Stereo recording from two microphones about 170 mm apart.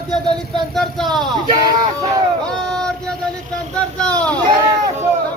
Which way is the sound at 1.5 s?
25° right (ahead or behind).